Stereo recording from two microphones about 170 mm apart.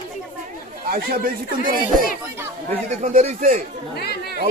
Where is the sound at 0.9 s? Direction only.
55° right (ahead or behind).